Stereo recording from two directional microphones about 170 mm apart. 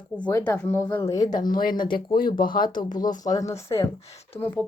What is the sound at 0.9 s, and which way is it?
Speech, 25° left (ahead or behind).